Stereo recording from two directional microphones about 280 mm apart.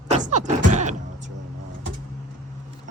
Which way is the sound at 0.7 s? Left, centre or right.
Right.